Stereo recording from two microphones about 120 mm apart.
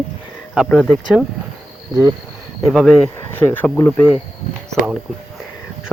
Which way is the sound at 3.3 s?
15° left (ahead or behind).